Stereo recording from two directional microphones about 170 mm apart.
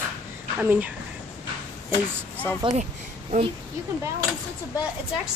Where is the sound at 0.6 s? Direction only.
10° right (ahead or behind).